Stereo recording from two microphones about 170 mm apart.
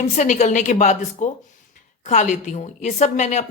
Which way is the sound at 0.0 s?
45° left (ahead or behind).